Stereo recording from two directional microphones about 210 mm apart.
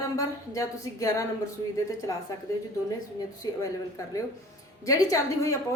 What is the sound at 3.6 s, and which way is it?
A woman's voice, 15° left (ahead or behind).